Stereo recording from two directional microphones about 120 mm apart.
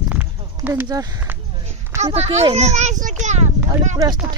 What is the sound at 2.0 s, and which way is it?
Speech, 65° right (ahead or behind).